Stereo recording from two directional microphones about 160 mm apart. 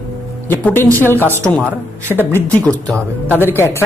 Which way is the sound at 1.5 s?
10° left (ahead or behind).